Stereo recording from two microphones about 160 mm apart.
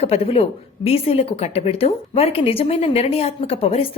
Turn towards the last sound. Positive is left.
turn(degrees=35)  # may be behind; listen again after turning